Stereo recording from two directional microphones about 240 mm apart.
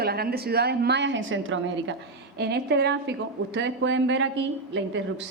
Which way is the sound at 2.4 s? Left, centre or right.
Right.